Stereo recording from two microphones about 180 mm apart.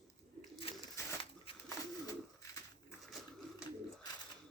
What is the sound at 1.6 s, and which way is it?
Bird, 20° left (ahead or behind).